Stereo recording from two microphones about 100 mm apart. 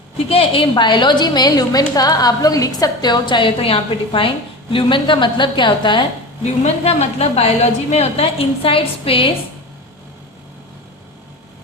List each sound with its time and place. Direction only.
0.3 s a woman's voice: 75° left (ahead or behind); by 6.1 s 55° left (ahead or behind)
6.8 s a woman's voice: 90° left; by 9.3 s 65° left (ahead or behind)